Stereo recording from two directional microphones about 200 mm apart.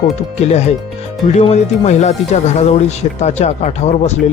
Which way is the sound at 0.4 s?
35° left (ahead or behind).